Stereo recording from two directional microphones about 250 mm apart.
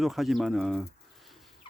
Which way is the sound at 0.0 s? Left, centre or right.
Centre.